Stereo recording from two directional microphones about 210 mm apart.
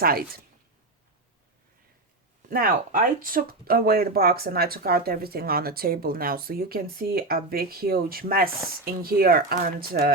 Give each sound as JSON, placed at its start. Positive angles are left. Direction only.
{"t": 0.0, "sound": "speech", "side_deg": -45}
{"t": 2.5, "sound": "speech", "side_deg": -45}